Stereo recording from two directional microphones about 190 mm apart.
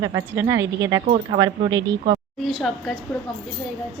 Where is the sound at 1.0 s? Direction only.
35° right (ahead or behind).